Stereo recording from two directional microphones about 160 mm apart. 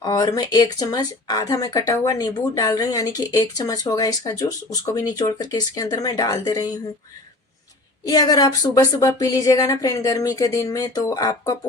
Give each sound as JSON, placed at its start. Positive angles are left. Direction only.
{"t": 0.0, "sound": "speech", "side_deg": 25}
{"t": 8.0, "sound": "speech", "side_deg": 25}